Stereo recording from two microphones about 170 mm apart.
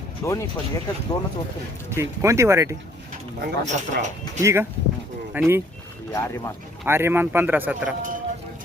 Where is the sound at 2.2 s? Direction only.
15° right (ahead or behind).